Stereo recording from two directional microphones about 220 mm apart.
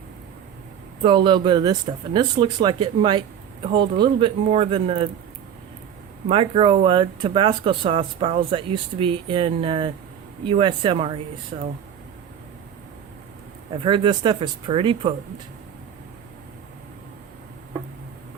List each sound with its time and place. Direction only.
1.0 s speech: 20° right (ahead or behind)
6.2 s speech: 25° right (ahead or behind)
13.8 s speech: 20° right (ahead or behind)